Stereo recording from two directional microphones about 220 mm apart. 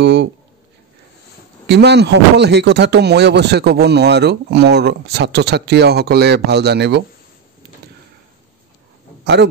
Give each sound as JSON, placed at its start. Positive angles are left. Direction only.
{"t": 0.0, "sound": "speech", "side_deg": -50}
{"t": 1.7, "sound": "speech", "side_deg": -50}
{"t": 9.2, "sound": "a man's voice", "side_deg": -50}